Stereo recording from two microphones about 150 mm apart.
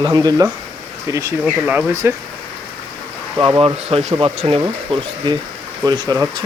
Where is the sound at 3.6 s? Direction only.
40° right (ahead or behind).